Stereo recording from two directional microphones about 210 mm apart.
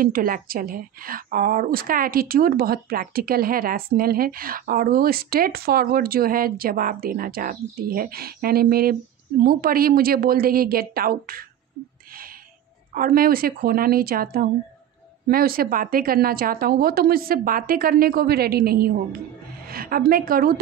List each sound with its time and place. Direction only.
0.0 s a woman's voice: 40° right (ahead or behind)
12.1 s a sound: 45° right (ahead or behind)
12.9 s a woman's voice: 45° right (ahead or behind)